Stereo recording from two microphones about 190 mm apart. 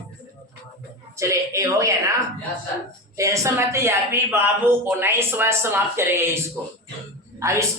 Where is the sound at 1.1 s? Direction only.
15° right (ahead or behind).